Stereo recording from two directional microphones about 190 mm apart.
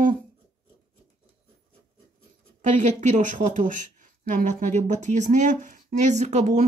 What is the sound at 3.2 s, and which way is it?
Speech, 40° right (ahead or behind).